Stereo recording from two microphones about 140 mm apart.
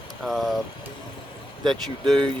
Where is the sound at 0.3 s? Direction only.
Centre (ahead or behind).